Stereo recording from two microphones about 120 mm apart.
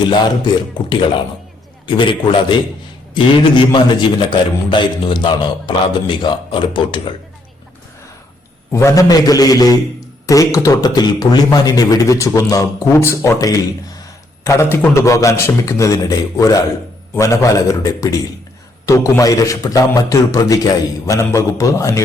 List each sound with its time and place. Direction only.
0.9 s a man's voice: 40° left (ahead or behind)
8.7 s a man's voice: 25° left (ahead or behind)